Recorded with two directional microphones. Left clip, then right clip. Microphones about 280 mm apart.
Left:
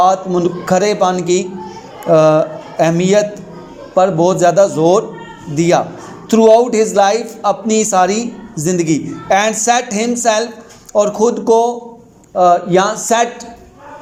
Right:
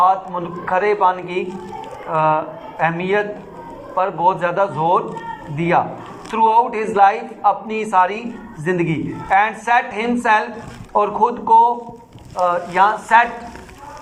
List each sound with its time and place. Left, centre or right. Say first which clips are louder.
0.0 s speech: left 4 dB; left